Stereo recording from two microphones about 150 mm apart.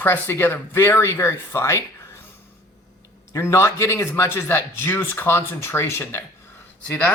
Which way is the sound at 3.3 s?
20° left (ahead or behind).